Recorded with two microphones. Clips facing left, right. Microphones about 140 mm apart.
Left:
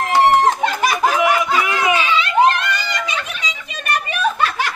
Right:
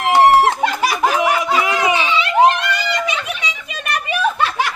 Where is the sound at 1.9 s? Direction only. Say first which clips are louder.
Even; 25° right (ahead or behind).